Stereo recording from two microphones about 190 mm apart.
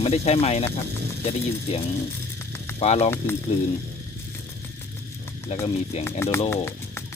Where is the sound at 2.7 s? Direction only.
30° left (ahead or behind).